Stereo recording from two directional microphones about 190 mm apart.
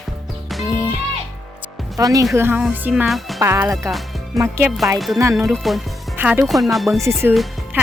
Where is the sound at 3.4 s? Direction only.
15° right (ahead or behind).